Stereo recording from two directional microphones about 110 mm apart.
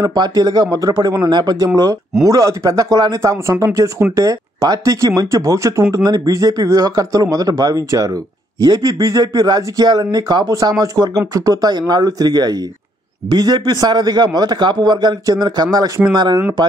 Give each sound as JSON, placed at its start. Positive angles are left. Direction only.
{"t": 0.0, "sound": "speech", "side_deg": -35}